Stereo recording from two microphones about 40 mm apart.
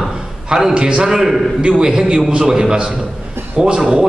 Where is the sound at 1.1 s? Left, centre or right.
Centre.